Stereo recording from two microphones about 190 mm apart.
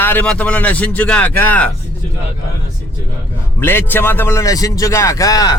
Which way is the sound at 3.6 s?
10° left (ahead or behind).